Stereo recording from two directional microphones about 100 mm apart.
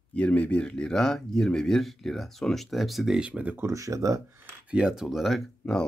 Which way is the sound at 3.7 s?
35° right (ahead or behind).